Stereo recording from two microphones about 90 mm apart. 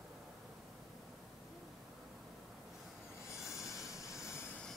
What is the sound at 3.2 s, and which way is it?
Train, 35° left (ahead or behind).